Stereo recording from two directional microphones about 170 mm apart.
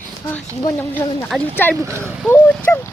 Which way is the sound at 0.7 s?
10° left (ahead or behind).